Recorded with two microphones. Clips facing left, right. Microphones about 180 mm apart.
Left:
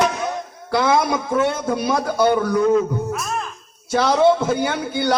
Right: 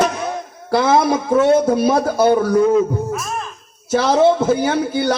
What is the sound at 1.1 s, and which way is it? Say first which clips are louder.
A man's voice: right 7 dB; 45° right (ahead or behind).